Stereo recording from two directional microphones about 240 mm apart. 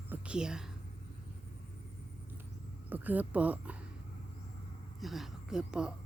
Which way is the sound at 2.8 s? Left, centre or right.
Centre.